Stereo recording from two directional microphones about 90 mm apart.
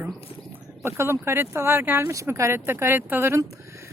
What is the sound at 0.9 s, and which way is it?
Speech, 30° right (ahead or behind).